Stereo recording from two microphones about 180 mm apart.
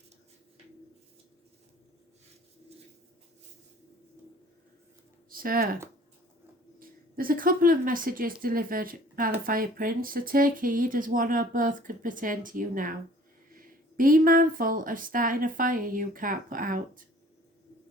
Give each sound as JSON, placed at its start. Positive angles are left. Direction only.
{"t": 5.3, "sound": "speech", "side_deg": -55}
{"t": 6.7, "sound": "a woman's voice", "side_deg": -50}